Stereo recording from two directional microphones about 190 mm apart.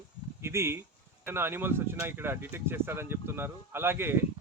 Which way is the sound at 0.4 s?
15° right (ahead or behind).